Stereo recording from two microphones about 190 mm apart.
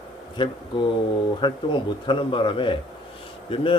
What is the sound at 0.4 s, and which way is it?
Speech, 25° left (ahead or behind).